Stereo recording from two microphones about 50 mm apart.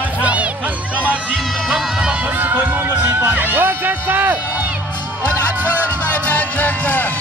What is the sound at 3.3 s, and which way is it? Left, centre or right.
Speech, right.